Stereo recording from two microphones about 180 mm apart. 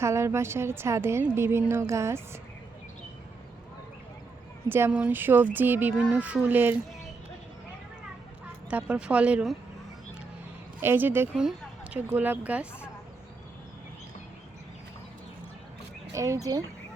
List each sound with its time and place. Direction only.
0.0 s a woman's voice: 15° right (ahead or behind)
4.7 s a woman's voice: 10° right (ahead or behind)
8.7 s a woman's voice: 5° right (ahead or behind)
10.8 s a woman's voice: 10° right (ahead or behind)
16.1 s speech: 15° right (ahead or behind)